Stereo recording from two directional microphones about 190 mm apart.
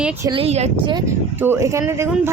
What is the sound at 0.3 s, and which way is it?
Speech, 30° right (ahead or behind).